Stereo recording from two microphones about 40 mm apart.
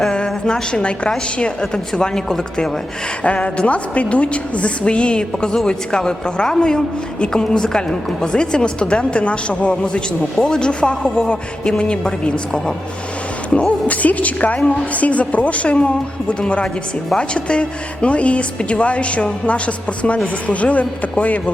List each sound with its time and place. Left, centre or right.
0.1 s a woman's voice: centre
3.2 s a man's voice: left
10.4 s speech: centre
10.7 s a man's voice: left
11.0 s a man's voice: centre
13.8 s a woman's voice: left